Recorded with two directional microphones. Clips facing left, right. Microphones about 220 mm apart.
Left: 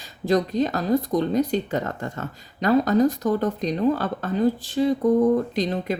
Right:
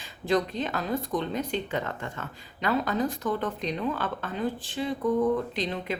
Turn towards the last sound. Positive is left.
turn(degrees=40)  # may be behind; listen again after turning